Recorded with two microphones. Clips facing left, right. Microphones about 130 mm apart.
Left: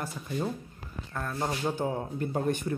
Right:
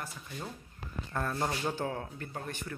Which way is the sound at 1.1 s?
Centre (ahead or behind).